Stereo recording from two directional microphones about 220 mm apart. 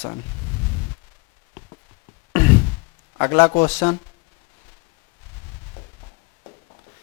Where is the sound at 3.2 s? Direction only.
20° left (ahead or behind).